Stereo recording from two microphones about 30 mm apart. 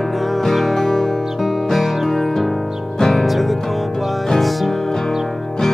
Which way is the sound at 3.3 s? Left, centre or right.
Centre.